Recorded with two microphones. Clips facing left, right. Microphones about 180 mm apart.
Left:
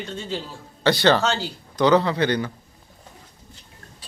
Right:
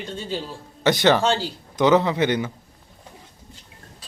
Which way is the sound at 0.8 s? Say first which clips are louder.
Even; 20° right (ahead or behind).